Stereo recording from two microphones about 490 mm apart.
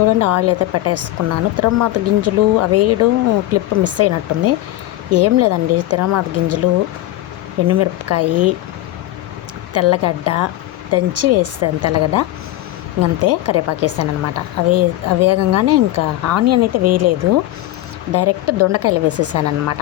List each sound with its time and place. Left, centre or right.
0.2 s speech: right
7.7 s speech: right
9.7 s speech: right